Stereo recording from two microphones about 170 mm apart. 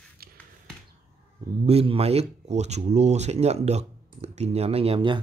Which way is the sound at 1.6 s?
35° right (ahead or behind).